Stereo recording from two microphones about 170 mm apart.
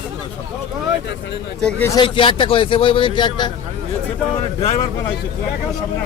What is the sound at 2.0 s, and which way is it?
A man's voice, 30° left (ahead or behind).